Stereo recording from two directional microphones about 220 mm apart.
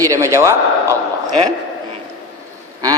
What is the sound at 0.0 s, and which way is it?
Speech, 15° right (ahead or behind).